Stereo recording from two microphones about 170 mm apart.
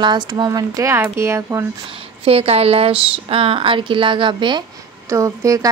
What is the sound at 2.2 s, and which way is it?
Speech, 35° right (ahead or behind).